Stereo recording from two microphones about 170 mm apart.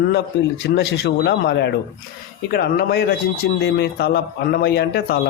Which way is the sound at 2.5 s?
65° left (ahead or behind).